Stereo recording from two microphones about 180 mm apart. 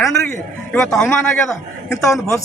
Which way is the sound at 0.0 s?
5° left (ahead or behind).